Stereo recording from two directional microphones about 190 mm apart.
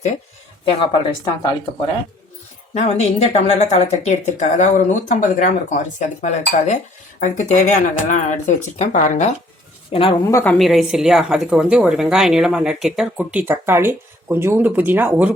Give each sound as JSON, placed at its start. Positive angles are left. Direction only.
{"t": 0.6, "sound": "speech", "side_deg": 25}
{"t": 2.7, "sound": "speech", "side_deg": 35}
{"t": 9.9, "sound": "speech", "side_deg": 30}
{"t": 10.2, "sound": "a woman's voice", "side_deg": 10}